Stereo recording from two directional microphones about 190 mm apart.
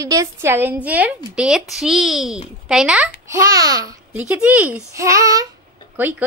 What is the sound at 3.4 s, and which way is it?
A woman's voice, 20° right (ahead or behind).